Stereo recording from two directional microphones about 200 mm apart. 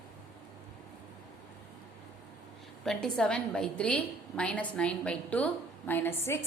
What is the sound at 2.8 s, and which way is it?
A woman's voice, 5° left (ahead or behind).